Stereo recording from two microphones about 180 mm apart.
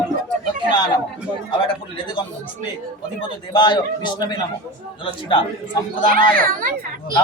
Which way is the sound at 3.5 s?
25° left (ahead or behind).